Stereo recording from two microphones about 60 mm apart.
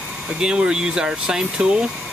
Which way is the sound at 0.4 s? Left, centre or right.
Centre.